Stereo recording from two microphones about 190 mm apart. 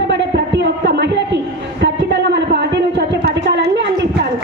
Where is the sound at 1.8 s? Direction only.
65° right (ahead or behind).